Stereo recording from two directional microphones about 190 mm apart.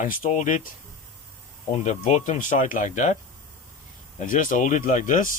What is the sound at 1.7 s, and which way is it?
Speech, 40° left (ahead or behind).